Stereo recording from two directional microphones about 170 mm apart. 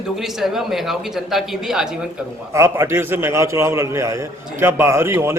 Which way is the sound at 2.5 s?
15° right (ahead or behind).